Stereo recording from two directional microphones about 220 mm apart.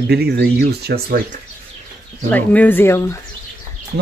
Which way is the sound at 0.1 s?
45° right (ahead or behind).